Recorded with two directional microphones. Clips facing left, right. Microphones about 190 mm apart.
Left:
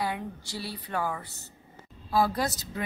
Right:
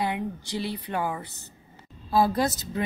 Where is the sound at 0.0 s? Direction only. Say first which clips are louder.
Right 4 dB; 20° right (ahead or behind).